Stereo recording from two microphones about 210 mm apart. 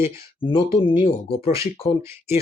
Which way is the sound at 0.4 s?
25° left (ahead or behind).